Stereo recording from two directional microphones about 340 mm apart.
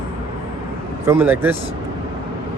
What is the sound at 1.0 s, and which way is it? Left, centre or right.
Speech, centre.